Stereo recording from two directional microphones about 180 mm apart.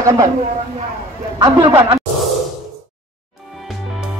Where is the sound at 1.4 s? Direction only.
25° right (ahead or behind).